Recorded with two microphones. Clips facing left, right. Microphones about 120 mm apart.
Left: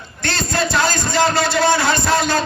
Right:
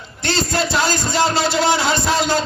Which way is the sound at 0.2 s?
15° right (ahead or behind).